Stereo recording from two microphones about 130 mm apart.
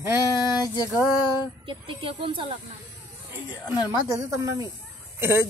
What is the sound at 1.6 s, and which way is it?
Speech, 40° right (ahead or behind).